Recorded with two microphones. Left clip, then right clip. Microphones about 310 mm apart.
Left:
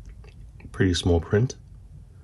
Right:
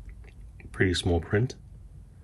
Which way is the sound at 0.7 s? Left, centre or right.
Centre.